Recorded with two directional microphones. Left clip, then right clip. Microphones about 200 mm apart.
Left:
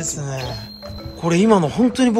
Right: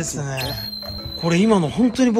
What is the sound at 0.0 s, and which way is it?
Speech, 15° left (ahead or behind).